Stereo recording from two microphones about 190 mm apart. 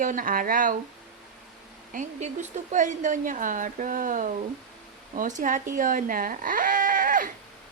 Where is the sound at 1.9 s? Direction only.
40° right (ahead or behind).